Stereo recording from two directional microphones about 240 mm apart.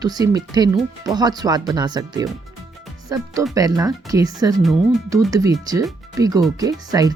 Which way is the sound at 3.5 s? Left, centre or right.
Centre.